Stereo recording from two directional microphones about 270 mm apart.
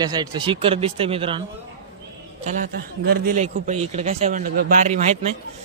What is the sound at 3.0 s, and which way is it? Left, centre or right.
A man's voice, right.